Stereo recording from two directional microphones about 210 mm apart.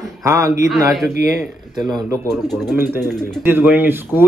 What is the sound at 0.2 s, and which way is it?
Speech, 15° right (ahead or behind).